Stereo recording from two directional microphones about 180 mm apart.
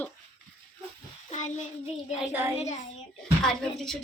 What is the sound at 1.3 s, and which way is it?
Child singing, 40° left (ahead or behind).